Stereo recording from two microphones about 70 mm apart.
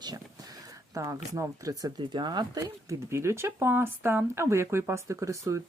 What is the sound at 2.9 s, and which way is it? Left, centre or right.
Speech, right.